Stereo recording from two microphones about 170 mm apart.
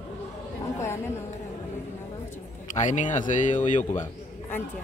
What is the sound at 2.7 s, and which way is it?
A man's voice, 45° left (ahead or behind).